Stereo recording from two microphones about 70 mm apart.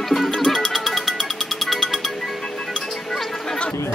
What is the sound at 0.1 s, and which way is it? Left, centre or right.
Music, centre.